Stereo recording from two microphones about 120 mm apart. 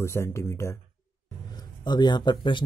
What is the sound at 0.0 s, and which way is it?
Speech, 20° left (ahead or behind).